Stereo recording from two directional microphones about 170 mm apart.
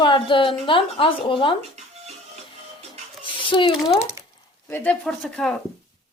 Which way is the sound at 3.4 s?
30° left (ahead or behind).